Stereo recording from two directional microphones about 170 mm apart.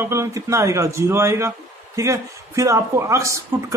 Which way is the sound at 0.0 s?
15° right (ahead or behind).